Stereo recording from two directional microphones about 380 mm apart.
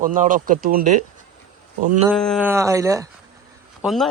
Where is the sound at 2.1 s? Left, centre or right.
Centre.